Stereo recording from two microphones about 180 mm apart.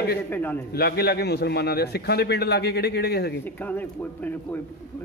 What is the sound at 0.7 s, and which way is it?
A man's voice, 60° left (ahead or behind).